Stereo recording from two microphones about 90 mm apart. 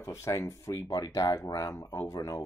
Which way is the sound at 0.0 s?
35° left (ahead or behind).